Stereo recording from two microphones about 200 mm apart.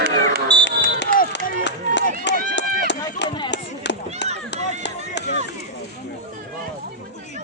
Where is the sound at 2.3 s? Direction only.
60° left (ahead or behind).